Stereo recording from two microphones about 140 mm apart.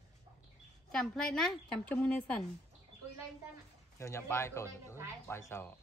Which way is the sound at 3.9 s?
20° left (ahead or behind).